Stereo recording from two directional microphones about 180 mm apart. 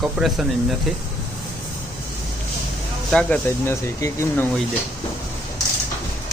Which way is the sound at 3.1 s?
5° left (ahead or behind).